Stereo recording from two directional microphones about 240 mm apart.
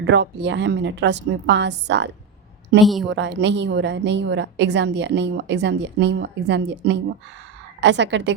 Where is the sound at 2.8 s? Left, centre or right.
Centre.